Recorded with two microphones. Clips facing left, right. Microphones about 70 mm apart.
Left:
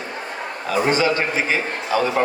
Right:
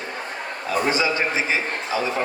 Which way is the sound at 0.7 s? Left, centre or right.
Left.